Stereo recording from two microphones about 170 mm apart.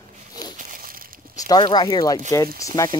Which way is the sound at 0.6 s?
55° right (ahead or behind).